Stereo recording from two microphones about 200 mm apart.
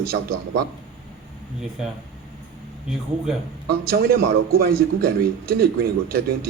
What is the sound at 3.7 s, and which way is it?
A man's voice, 50° right (ahead or behind).